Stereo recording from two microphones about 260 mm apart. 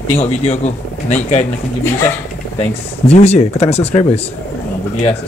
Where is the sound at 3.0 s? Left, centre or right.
Left.